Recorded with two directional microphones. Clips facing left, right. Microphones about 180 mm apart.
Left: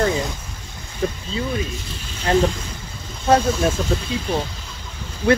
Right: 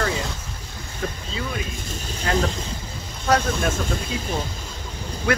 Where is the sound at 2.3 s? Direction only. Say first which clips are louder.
Left 5 dB; 30° left (ahead or behind).